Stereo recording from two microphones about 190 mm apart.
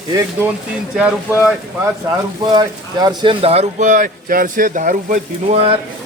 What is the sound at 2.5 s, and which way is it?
Speech, 20° right (ahead or behind).